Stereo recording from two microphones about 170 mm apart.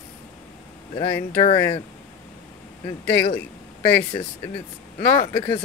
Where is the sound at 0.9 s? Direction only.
25° left (ahead or behind).